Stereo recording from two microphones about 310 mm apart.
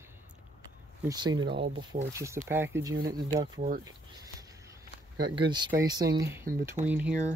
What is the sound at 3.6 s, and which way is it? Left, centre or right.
Speech, right.